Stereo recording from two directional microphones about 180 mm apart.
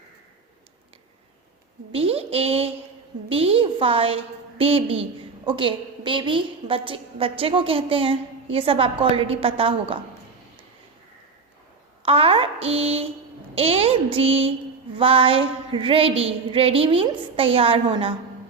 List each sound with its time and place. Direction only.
1.9 s a woman's voice: 30° right (ahead or behind)
12.0 s a sound: 35° right (ahead or behind)
13.6 s a woman's voice: 30° right (ahead or behind)